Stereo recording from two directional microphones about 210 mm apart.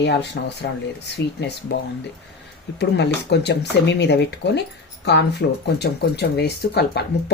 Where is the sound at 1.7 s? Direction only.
50° left (ahead or behind).